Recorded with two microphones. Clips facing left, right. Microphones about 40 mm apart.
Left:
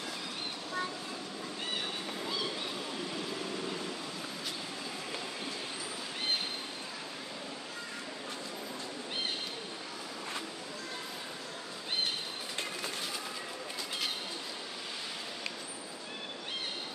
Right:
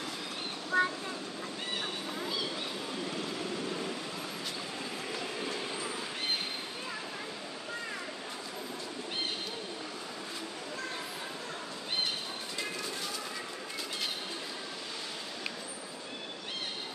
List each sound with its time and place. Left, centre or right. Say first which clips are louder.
0.7 s train: right 9 dB; right